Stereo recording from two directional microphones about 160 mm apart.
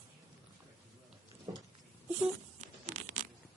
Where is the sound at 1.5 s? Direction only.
30° right (ahead or behind).